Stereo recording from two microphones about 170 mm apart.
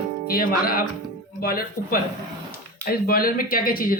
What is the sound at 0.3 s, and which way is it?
A man's voice, 60° left (ahead or behind).